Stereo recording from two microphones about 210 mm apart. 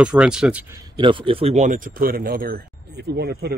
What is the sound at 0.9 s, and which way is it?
Speech, 25° right (ahead or behind).